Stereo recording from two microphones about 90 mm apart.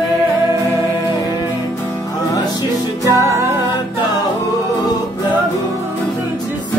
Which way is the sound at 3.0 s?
35° right (ahead or behind).